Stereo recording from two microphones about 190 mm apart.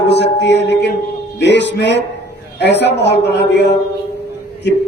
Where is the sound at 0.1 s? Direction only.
65° left (ahead or behind).